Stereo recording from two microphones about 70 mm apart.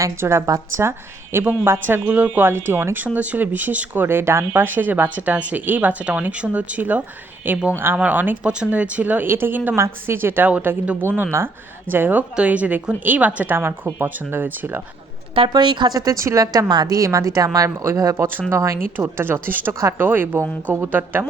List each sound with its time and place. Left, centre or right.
0.2 s a woman's voice: right
0.4 s a woman's voice: right
0.9 s speech: right
8.4 s speech: centre
9.7 s a woman's voice: right
15.4 s a woman's voice: right
17.0 s speech: right
18.9 s a woman's voice: right